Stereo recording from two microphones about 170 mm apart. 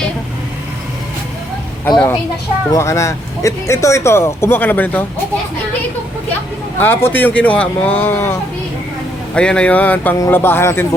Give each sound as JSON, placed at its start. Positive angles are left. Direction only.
{"t": 2.7, "sound": "speech", "side_deg": 15}
{"t": 6.7, "sound": "speech", "side_deg": 10}
{"t": 9.3, "sound": "speech", "side_deg": 5}